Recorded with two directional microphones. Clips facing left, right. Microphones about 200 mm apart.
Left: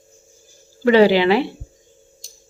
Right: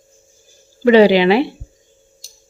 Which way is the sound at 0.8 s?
15° right (ahead or behind).